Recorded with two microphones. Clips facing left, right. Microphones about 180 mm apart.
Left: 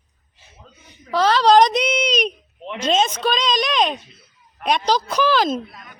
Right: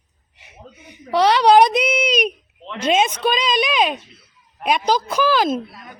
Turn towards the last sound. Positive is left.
turn(degrees=-5)  # may be behind; listen again after turning